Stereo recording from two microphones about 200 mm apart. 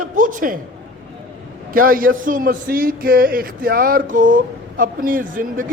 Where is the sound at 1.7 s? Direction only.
45° right (ahead or behind).